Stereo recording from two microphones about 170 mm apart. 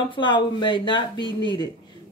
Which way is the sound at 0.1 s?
30° left (ahead or behind).